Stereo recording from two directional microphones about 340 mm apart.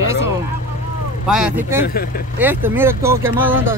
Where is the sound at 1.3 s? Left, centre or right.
Centre.